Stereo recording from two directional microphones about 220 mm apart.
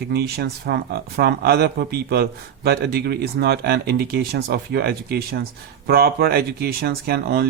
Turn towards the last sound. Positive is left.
turn(degrees=-45)  # may be behind; listen again after turning